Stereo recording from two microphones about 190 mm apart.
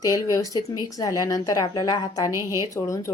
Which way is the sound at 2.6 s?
15° left (ahead or behind).